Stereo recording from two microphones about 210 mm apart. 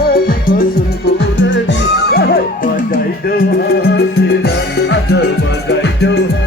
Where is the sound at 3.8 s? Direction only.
55° left (ahead or behind).